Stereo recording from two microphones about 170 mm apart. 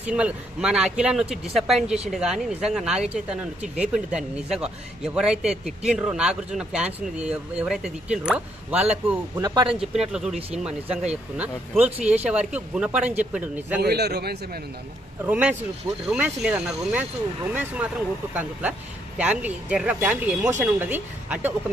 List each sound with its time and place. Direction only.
0.0 s speech: 5° right (ahead or behind)
9.4 s speech: 25° right (ahead or behind)
9.8 s speech: 5° right (ahead or behind)
11.3 s speech: 10° right (ahead or behind)
13.7 s a man's voice: 75° right (ahead or behind)
15.2 s speech: 10° right (ahead or behind)